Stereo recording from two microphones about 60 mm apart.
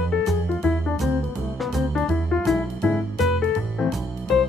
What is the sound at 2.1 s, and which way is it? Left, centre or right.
Music, centre.